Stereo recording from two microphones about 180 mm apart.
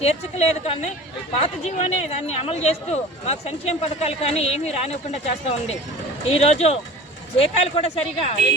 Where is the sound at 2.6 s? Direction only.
35° left (ahead or behind).